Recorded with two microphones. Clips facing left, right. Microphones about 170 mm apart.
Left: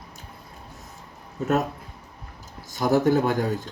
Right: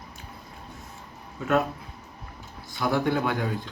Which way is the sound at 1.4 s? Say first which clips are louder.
Left 1 dB; 40° left (ahead or behind).